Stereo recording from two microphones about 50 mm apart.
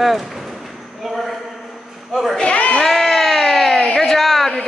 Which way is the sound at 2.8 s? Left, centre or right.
Centre.